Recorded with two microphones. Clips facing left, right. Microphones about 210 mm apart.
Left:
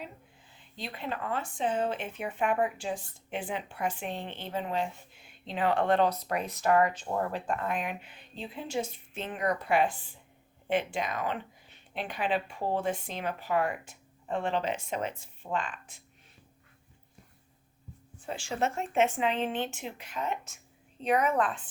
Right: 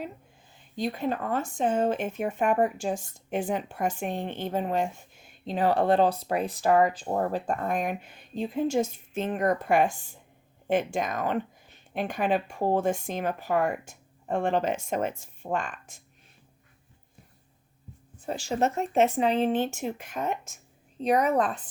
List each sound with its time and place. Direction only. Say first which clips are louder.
0.5 s speech: right 11 dB; 45° right (ahead or behind)
18.3 s speech: right 5 dB; 40° right (ahead or behind)